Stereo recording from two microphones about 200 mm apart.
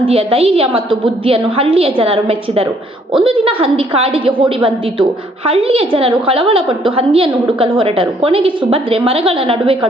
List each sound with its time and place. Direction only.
0.0 s a woman's voice: 30° right (ahead or behind)